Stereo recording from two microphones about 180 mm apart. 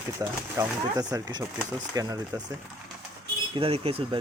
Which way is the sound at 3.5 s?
30° right (ahead or behind).